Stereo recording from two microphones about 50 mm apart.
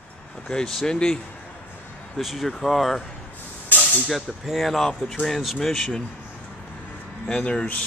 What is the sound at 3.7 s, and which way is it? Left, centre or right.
Hiss, left.